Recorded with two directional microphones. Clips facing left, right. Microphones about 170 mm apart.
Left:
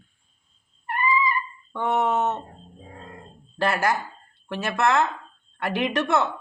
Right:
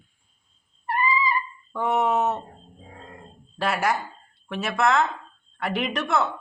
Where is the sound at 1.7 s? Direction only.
Centre (ahead or behind).